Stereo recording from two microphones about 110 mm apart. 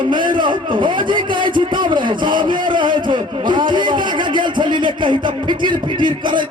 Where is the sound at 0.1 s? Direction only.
45° right (ahead or behind).